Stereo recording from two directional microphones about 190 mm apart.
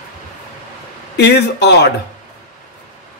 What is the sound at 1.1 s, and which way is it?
Speech, 60° left (ahead or behind).